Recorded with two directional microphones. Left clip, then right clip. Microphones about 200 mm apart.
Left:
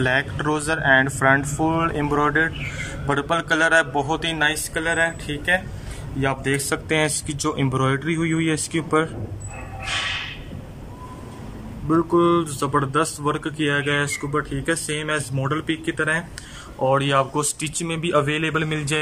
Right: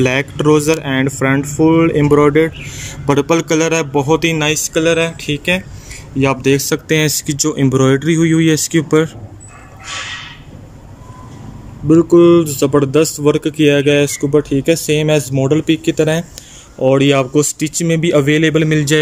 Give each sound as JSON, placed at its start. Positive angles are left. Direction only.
{"t": 0.0, "sound": "speech", "side_deg": -15}
{"t": 11.9, "sound": "speech", "side_deg": -15}